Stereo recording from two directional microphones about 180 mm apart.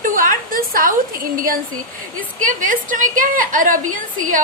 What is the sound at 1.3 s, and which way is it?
A woman's voice, 50° right (ahead or behind).